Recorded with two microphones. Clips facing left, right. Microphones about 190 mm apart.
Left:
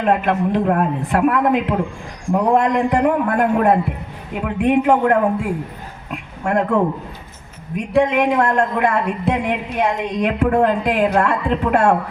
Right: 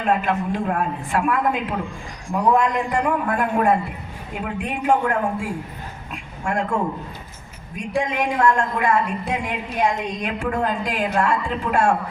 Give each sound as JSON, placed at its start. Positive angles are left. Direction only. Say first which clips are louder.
{"t": 0.0, "sound": "a man's voice", "louder": "left 4 dB", "side_deg": 60}